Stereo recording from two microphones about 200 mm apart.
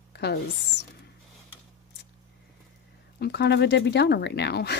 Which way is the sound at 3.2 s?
55° left (ahead or behind).